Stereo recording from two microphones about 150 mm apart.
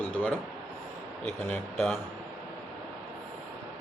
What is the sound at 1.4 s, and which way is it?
Speech, 5° left (ahead or behind).